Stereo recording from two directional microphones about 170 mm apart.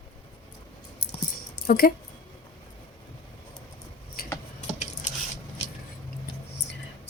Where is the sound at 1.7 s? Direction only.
60° left (ahead or behind).